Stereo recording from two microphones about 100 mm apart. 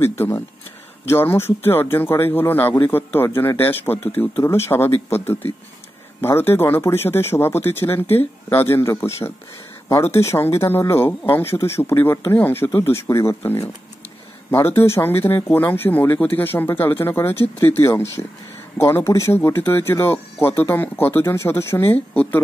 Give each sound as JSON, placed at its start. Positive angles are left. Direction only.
{"t": 1.0, "sound": "speech", "side_deg": 25}
{"t": 21.9, "sound": "speech", "side_deg": 15}